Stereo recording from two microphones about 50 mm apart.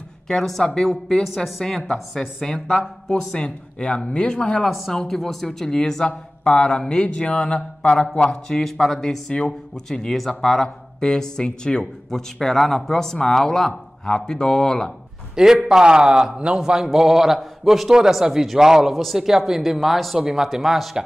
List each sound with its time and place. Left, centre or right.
0.3 s speech: centre
1.6 s speech: centre
4.6 s a man's voice: centre
9.3 s a man's voice: centre
9.8 s speech: centre
15.3 s a man's voice: centre